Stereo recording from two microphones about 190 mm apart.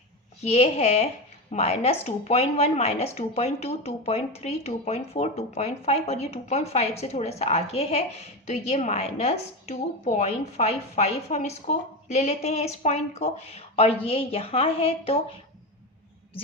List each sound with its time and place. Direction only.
0.4 s a woman's voice: 35° left (ahead or behind)